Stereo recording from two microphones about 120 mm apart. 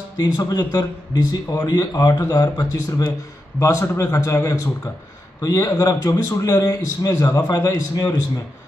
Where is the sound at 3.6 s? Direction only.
20° left (ahead or behind).